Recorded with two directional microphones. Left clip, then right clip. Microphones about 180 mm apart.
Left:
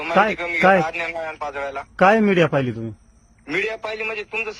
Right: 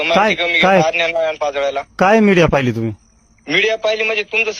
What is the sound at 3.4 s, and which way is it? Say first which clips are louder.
A man's voice: right 9 dB; 10° right (ahead or behind).